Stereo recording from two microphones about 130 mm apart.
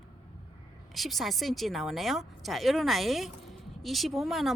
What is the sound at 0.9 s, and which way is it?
A woman's voice, centre (ahead or behind).